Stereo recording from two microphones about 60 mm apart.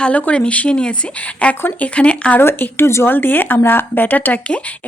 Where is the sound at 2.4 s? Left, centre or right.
Left.